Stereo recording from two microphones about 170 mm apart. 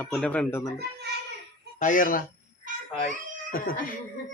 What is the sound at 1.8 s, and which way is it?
Speech, 50° left (ahead or behind).